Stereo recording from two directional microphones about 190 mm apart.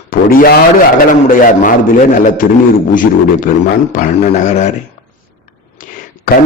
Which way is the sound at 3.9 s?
40° left (ahead or behind).